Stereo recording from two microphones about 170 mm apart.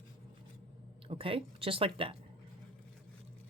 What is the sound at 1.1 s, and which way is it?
Speech, 30° right (ahead or behind).